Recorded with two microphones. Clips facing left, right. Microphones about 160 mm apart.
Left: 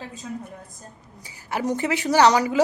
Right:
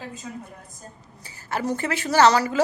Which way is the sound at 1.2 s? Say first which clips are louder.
Left 1 dB; 15° left (ahead or behind).